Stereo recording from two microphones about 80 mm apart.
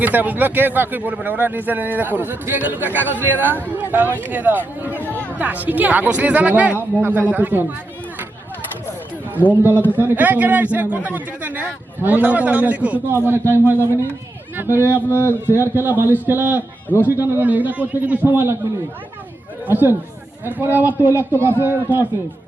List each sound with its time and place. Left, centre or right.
0.0 s speech: right
9.5 s speech: right
13.1 s speech: right
14.8 s speech: left
15.5 s speech: right
19.6 s speech: right